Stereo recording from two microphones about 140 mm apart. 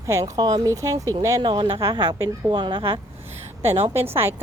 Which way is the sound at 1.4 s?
35° right (ahead or behind).